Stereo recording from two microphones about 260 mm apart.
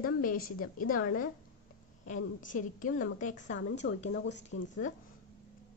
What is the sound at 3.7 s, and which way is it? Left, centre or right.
Speech, left.